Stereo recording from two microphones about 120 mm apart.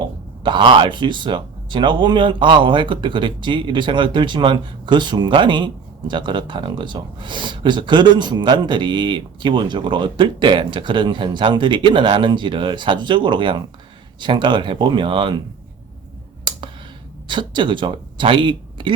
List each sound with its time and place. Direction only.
0.4 s speech: 40° right (ahead or behind)
16.4 s clicking: 40° right (ahead or behind)
17.2 s speech: 40° right (ahead or behind)